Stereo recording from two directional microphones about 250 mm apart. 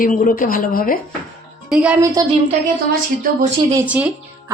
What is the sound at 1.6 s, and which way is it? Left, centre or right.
Speech, centre.